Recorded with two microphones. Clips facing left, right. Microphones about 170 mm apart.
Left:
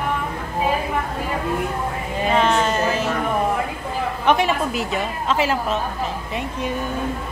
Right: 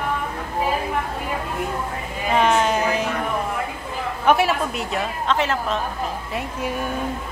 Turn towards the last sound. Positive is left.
turn(degrees=-10)  # may be behind; listen again after turning